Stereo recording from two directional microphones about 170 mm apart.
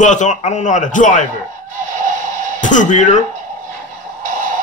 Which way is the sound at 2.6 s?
45° left (ahead or behind).